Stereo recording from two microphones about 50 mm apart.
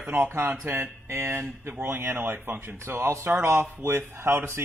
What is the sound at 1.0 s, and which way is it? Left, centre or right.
A man's voice, right.